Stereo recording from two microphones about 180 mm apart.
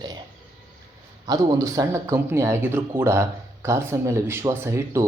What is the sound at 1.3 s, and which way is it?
Speech, 20° right (ahead or behind).